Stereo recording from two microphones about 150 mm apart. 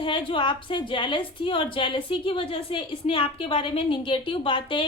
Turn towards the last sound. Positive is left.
turn(degrees=35)  # may be behind; listen again after turning